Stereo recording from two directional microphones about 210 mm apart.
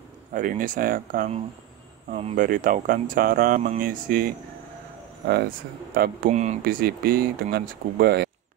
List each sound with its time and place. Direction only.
0.3 s speech: 40° right (ahead or behind)
6.3 s speech: 30° right (ahead or behind)
6.6 s speech: 45° right (ahead or behind)